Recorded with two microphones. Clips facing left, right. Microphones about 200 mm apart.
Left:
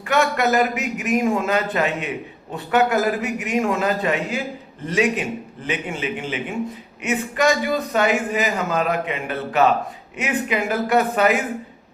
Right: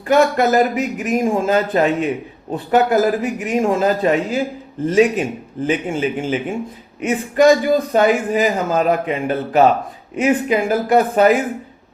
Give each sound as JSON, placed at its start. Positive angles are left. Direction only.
{"t": 0.1, "sound": "a man's voice", "side_deg": -35}
{"t": 7.0, "sound": "a man's voice", "side_deg": -35}